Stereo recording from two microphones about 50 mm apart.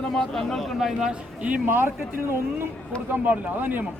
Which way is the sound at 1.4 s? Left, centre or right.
Right.